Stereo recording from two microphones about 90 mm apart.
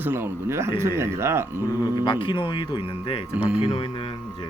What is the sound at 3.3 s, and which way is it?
Speech, 10° right (ahead or behind).